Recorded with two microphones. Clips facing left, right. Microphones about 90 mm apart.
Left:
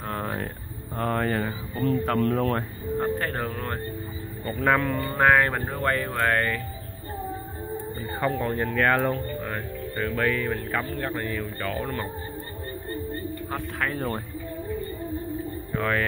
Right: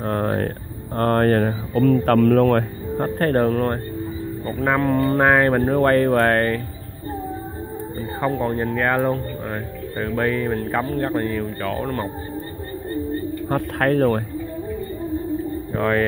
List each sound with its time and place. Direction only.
0.0 s a sound: 45° right (ahead or behind)
0.9 s speech: 60° right (ahead or behind)
4.6 s speech: 20° right (ahead or behind)
4.9 s speech: 40° right (ahead or behind)
5.2 s speech: 30° right (ahead or behind)
5.8 s speech: 45° right (ahead or behind)
8.4 s speech: 20° right (ahead or behind); by 12.0 s 45° right (ahead or behind)
13.5 s speech: 55° right (ahead or behind)
15.7 s speech: 30° right (ahead or behind)